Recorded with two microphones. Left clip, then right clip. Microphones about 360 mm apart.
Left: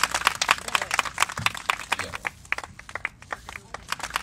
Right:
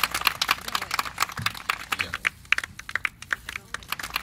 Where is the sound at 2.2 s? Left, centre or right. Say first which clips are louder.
Right 8 dB; centre.